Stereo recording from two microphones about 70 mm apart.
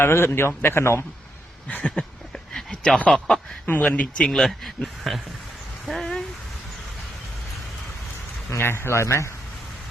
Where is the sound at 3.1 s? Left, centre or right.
Centre.